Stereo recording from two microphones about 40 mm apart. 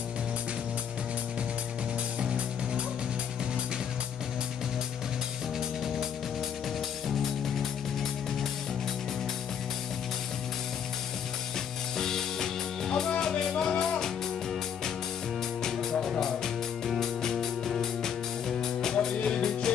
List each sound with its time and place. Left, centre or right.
2.1 s music: right
12.0 s music: centre
15.6 s music: centre